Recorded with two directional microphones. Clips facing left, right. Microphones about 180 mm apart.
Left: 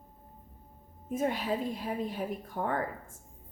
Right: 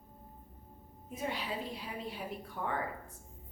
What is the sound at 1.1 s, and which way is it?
Speech, 45° left (ahead or behind).